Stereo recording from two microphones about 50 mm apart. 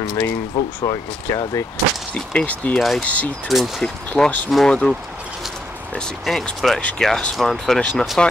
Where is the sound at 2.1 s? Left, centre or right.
Left.